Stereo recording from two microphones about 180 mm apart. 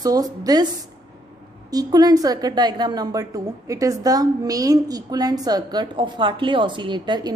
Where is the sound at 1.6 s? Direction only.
20° right (ahead or behind).